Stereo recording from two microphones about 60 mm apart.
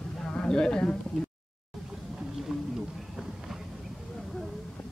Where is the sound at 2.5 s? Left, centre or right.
Centre.